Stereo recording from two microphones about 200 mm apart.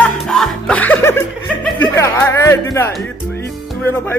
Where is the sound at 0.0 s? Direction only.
Centre (ahead or behind).